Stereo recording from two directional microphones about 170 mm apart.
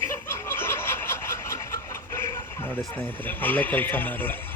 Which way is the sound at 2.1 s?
15° left (ahead or behind).